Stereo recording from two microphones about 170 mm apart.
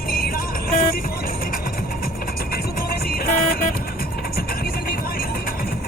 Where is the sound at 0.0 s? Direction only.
60° left (ahead or behind).